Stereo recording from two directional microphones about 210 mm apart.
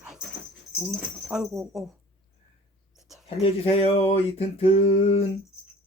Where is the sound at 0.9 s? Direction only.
Centre (ahead or behind).